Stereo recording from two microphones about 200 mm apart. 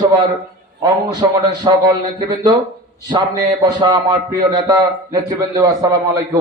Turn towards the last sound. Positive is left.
turn(degrees=-15)  # may be behind; listen again after turning